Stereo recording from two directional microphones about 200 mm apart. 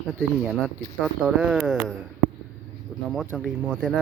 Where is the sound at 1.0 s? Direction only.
5° right (ahead or behind).